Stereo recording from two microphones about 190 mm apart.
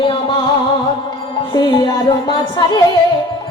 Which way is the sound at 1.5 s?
20° left (ahead or behind).